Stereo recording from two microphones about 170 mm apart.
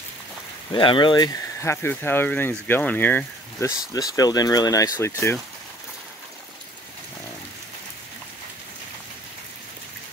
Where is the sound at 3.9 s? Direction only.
20° left (ahead or behind).